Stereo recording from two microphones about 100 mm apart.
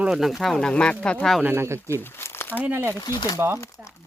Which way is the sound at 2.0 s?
25° left (ahead or behind).